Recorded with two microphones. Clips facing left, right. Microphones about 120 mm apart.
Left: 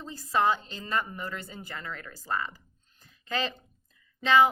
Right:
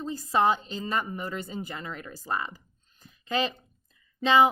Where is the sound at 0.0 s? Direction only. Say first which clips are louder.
Right 2 dB; 20° right (ahead or behind).